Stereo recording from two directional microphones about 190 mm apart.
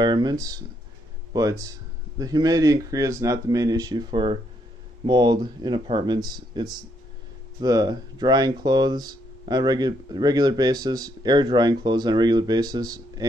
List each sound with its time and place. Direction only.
0.0 s a man's voice: 20° right (ahead or behind)